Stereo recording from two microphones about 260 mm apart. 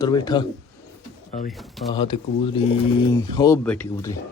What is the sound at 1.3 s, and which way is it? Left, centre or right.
Speech, left.